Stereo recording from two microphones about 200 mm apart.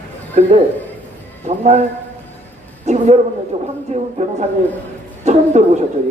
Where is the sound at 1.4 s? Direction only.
35° right (ahead or behind).